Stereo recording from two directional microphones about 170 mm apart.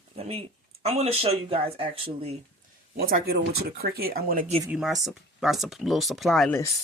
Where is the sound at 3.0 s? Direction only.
60° right (ahead or behind).